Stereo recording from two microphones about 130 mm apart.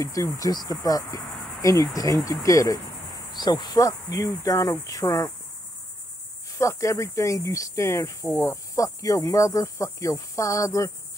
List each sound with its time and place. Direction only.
0.0 s cricket: 25° left (ahead or behind)
6.6 s cricket: 25° left (ahead or behind)